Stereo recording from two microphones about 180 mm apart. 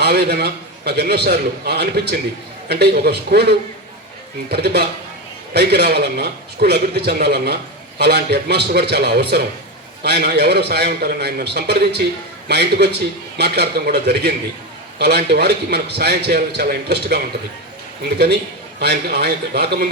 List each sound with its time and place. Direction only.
0.0 s a man's voice: 65° right (ahead or behind)
18.8 s a man's voice: 65° right (ahead or behind)